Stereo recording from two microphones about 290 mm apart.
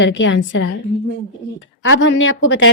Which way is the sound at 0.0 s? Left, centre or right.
Left.